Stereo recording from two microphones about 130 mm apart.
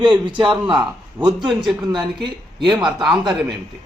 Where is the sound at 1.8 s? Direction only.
35° right (ahead or behind).